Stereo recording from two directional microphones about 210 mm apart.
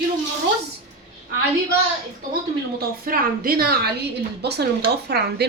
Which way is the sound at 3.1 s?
45° right (ahead or behind).